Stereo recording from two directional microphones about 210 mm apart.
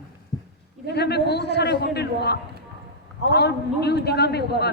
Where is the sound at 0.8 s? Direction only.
50° left (ahead or behind).